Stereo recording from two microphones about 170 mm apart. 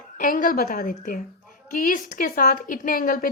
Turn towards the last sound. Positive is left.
turn(degrees=55)  # may be behind; listen again after turning